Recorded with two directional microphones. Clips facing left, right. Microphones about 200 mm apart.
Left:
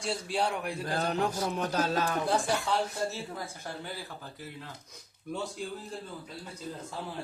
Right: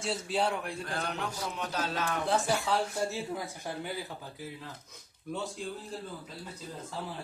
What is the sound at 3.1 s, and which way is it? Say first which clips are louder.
Speech: right 3 dB; 15° right (ahead or behind).